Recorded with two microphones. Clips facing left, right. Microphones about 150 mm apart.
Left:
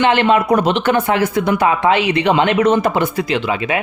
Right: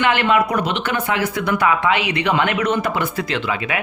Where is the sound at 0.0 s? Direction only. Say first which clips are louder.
Left 4 dB; 25° left (ahead or behind).